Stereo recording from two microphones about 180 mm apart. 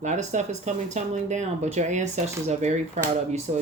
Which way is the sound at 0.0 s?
40° right (ahead or behind).